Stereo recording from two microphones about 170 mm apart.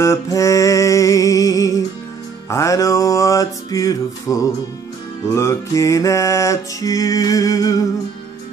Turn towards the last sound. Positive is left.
turn(degrees=20)  # may be behind; listen again after turning